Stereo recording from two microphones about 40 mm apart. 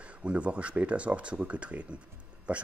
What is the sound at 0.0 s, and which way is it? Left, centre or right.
Speech, right.